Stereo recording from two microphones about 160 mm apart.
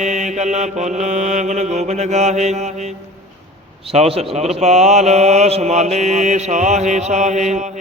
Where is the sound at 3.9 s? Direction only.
40° right (ahead or behind).